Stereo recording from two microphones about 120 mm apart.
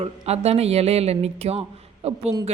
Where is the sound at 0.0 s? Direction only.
60° right (ahead or behind).